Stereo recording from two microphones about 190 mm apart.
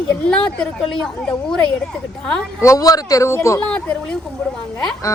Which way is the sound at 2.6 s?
15° left (ahead or behind).